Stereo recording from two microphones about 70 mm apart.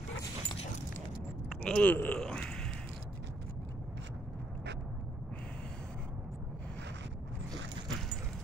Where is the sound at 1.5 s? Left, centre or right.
Centre.